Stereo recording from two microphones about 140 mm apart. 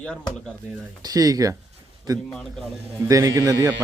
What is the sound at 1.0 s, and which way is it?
Speech, 25° right (ahead or behind).